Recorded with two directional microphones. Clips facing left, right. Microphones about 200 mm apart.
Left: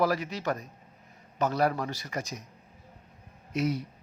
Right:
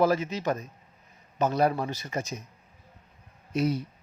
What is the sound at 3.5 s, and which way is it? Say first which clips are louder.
Speech: right 2 dB; 30° right (ahead or behind).